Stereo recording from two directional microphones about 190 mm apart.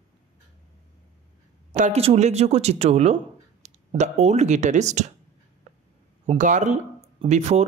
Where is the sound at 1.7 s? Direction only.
40° right (ahead or behind).